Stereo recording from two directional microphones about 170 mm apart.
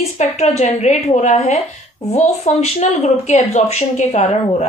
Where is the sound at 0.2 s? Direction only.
40° left (ahead or behind).